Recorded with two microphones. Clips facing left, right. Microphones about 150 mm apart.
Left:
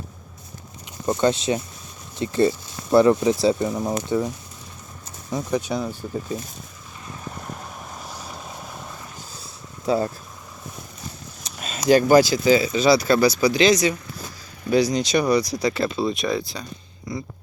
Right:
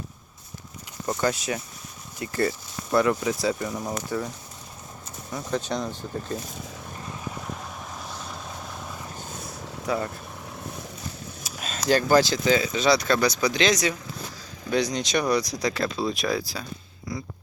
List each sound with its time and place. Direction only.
1.0 s speech: 25° left (ahead or behind)
5.3 s speech: 10° left (ahead or behind)
7.5 s vehicle: 5° left (ahead or behind)
9.8 s speech: 30° left (ahead or behind)
11.4 s vehicle: centre (ahead or behind)
11.8 s speech: 15° left (ahead or behind); by 17.2 s centre (ahead or behind)